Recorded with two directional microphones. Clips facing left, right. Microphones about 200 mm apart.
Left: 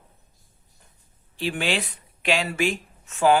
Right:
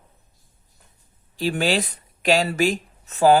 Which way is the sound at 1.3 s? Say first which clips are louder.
Right 4 dB; 40° right (ahead or behind).